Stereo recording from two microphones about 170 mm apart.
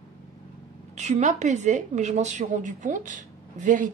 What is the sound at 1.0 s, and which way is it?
A woman's voice, 45° right (ahead or behind).